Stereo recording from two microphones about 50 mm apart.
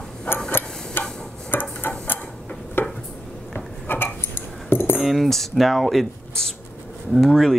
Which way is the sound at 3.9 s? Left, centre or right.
Left.